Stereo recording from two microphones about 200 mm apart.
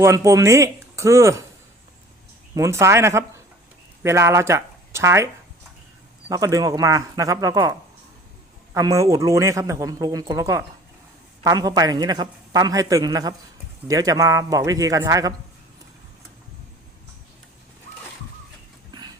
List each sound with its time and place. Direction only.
0.0 s a man's voice: 15° right (ahead or behind)
2.6 s a man's voice: 15° right (ahead or behind)